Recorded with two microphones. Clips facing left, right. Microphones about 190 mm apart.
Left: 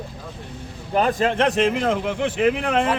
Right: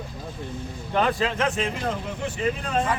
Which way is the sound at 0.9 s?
40° left (ahead or behind).